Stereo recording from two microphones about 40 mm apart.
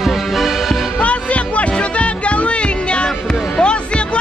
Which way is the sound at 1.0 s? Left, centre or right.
Left.